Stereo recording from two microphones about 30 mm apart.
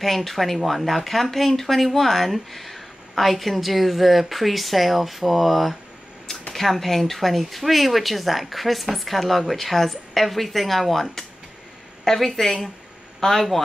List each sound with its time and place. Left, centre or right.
0.0 s a woman's voice: centre